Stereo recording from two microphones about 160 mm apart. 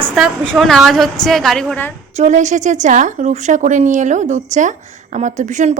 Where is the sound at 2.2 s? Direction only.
50° right (ahead or behind).